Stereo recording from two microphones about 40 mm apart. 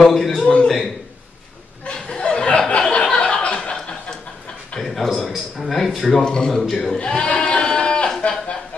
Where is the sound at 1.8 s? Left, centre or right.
Left.